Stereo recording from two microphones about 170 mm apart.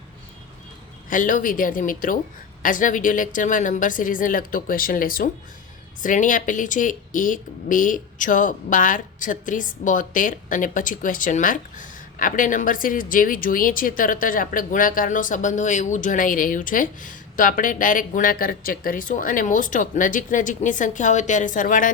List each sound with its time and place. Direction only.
1.1 s speech: 50° left (ahead or behind)